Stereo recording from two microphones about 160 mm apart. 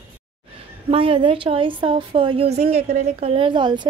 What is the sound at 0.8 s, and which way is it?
A woman's voice, 35° right (ahead or behind).